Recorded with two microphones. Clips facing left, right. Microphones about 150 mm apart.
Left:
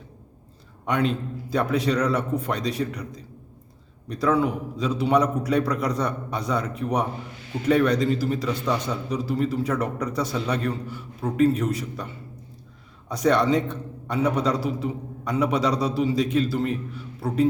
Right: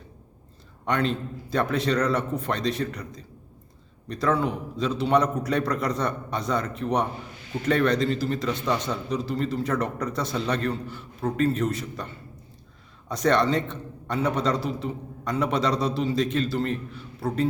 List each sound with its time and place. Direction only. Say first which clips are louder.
0.9 s a man's voice: left 1 dB; 10° left (ahead or behind)